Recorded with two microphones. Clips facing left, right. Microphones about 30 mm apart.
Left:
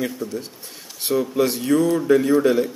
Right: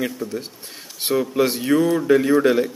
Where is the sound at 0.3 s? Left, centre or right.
Right.